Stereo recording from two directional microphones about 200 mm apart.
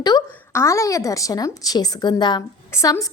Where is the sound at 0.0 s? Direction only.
15° left (ahead or behind).